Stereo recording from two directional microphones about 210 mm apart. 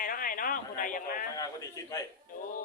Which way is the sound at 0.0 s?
40° left (ahead or behind).